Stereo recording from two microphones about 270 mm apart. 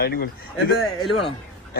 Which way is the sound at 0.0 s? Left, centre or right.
Left.